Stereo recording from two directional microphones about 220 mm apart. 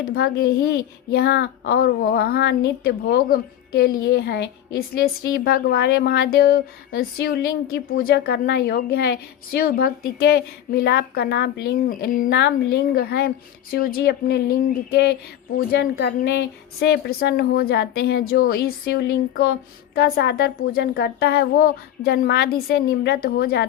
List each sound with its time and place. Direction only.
0.0 s a child's voice: 45° left (ahead or behind)
15.5 s a child's voice: 45° left (ahead or behind)